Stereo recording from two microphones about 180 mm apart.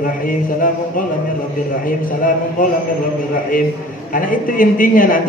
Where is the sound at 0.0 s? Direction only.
50° left (ahead or behind).